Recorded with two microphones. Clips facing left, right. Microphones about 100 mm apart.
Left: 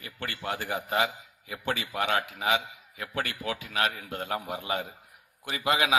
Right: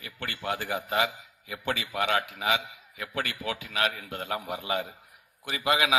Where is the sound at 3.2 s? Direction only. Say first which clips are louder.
Even; 45° left (ahead or behind).